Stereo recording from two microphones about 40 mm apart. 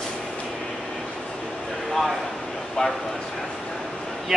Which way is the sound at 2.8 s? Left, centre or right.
Centre.